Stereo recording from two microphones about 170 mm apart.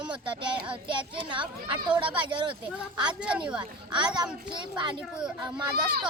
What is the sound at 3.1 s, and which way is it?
Speech, 5° right (ahead or behind).